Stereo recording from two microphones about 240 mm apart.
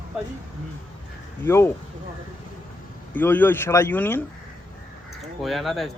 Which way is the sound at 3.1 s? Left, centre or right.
Centre.